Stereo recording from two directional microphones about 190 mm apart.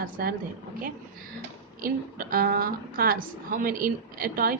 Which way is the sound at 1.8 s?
50° right (ahead or behind).